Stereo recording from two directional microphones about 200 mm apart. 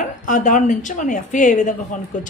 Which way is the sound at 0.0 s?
40° left (ahead or behind).